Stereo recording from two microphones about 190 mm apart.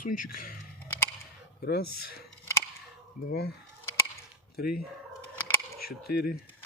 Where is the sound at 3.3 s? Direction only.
55° left (ahead or behind).